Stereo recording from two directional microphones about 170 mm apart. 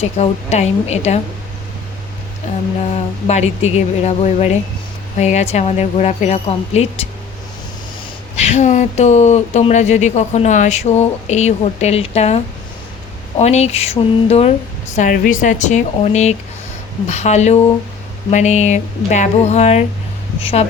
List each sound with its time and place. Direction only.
0.0 s speech: 40° left (ahead or behind)
2.5 s speech: 45° left (ahead or behind)
8.4 s speech: 40° left (ahead or behind)